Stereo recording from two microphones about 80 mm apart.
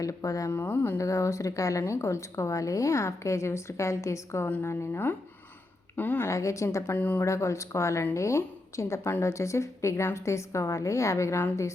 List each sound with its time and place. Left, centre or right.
0.0 s speech: left
0.5 s speech: left
0.9 s a woman's voice: left
4.4 s a woman's voice: left
6.2 s a woman's voice: left
6.9 s speech: left
7.3 s a woman's voice: left